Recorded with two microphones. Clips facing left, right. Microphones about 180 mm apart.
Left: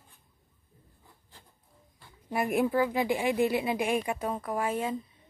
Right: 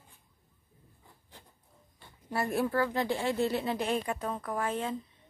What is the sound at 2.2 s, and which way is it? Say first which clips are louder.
Speech: left 3 dB; 15° left (ahead or behind).